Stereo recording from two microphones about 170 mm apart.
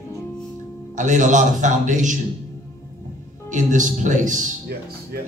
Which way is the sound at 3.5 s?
45° right (ahead or behind).